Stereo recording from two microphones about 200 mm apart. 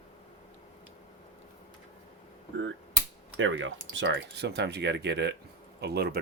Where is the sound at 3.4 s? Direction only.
75° right (ahead or behind); by 6.2 s 50° right (ahead or behind).